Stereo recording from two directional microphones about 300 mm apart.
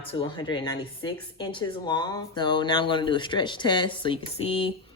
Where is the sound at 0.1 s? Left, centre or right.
Centre.